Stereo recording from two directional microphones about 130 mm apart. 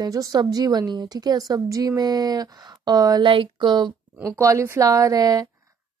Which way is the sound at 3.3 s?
40° right (ahead or behind).